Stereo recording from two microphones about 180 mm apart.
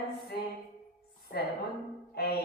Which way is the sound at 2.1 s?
60° left (ahead or behind).